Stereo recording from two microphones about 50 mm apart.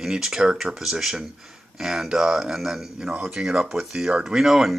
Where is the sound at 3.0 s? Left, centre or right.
Centre.